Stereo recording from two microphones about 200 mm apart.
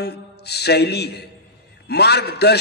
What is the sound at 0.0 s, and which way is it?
A man's voice, 55° left (ahead or behind).